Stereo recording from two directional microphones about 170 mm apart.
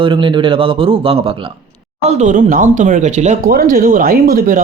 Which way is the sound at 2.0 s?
45° right (ahead or behind).